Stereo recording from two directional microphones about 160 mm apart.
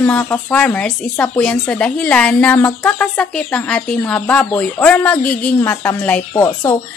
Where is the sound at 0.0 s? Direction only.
10° left (ahead or behind).